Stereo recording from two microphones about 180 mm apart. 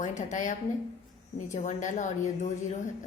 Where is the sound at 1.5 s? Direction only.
45° left (ahead or behind).